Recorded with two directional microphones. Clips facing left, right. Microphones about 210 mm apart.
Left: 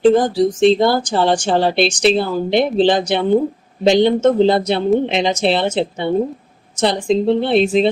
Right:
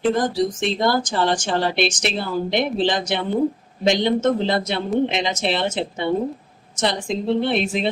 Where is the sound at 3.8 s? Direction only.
30° left (ahead or behind).